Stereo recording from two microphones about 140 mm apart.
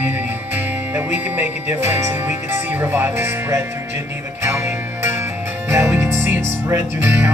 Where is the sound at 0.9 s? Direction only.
15° right (ahead or behind).